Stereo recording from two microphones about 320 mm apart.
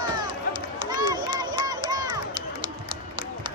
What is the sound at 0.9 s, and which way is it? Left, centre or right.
Run, centre.